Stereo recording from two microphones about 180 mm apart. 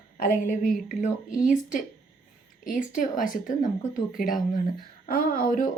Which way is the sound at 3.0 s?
45° left (ahead or behind).